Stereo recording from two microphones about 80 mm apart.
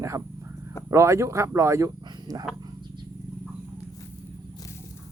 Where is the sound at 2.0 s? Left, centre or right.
Right.